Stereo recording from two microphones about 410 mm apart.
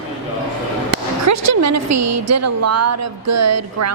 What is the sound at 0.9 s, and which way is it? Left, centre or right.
A woman's voice, right.